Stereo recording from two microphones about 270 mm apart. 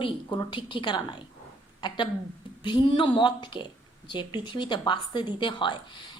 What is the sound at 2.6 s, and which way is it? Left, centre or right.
A woman's voice, centre.